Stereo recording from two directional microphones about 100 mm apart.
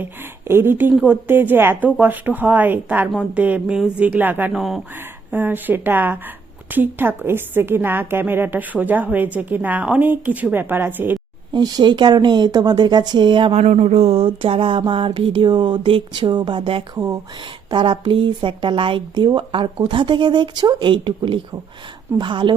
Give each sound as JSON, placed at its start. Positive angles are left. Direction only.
{"t": 0.0, "sound": "a woman's voice", "side_deg": -25}
{"t": 4.5, "sound": "speech", "side_deg": 0}
{"t": 5.3, "sound": "a woman's voice", "side_deg": -20}
{"t": 11.5, "sound": "speech", "side_deg": -50}
{"t": 13.5, "sound": "speech", "side_deg": -90}
{"t": 16.9, "sound": "speech", "side_deg": -35}
{"t": 17.7, "sound": "speech", "side_deg": -50}